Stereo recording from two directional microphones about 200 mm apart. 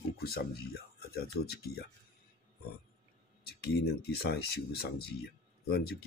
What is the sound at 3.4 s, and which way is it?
Speech, 50° left (ahead or behind).